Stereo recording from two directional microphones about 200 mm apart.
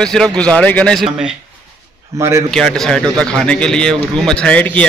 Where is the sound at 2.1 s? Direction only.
15° right (ahead or behind).